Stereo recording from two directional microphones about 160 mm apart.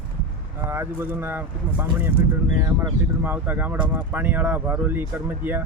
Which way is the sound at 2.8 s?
10° right (ahead or behind).